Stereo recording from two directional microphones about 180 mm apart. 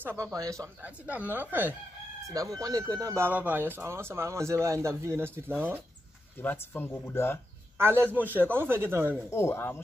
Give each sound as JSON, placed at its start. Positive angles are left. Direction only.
{"t": 0.0, "sound": "speech", "side_deg": -15}
{"t": 6.4, "sound": "speech", "side_deg": 10}
{"t": 7.7, "sound": "speech", "side_deg": -15}
{"t": 9.3, "sound": "speech", "side_deg": 15}